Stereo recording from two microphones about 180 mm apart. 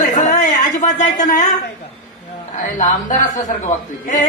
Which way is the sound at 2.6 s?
45° left (ahead or behind).